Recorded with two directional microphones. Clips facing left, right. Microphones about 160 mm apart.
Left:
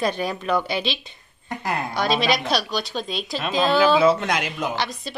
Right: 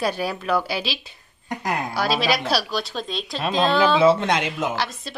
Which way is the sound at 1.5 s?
15° right (ahead or behind).